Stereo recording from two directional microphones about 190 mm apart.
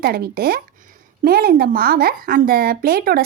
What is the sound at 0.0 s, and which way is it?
Speech, 55° right (ahead or behind).